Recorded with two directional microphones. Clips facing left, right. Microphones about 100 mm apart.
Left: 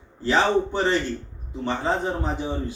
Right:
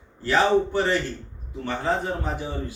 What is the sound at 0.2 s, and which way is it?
A man's voice, 20° left (ahead or behind).